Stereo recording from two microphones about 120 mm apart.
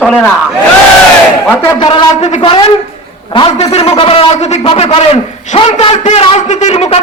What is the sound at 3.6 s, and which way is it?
Speech, 60° left (ahead or behind).